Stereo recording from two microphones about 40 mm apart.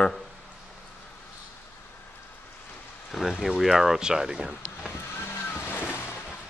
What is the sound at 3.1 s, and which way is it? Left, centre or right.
Speech, centre.